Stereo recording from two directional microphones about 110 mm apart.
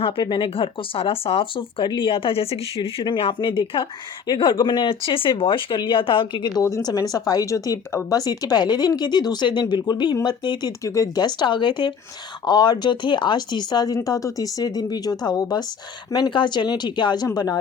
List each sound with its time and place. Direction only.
0.0 s speech: 50° left (ahead or behind); by 2.9 s 65° left (ahead or behind)
3.0 s speech: 50° left (ahead or behind)
6.5 s speech: 30° left (ahead or behind)
10.7 s speech: 30° left (ahead or behind)